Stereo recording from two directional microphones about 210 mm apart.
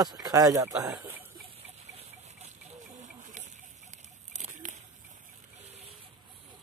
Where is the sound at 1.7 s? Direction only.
30° right (ahead or behind).